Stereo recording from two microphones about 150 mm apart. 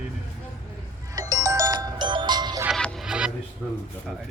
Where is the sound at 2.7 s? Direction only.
5° left (ahead or behind).